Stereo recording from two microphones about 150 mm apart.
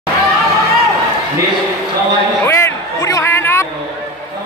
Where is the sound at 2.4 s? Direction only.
20° left (ahead or behind).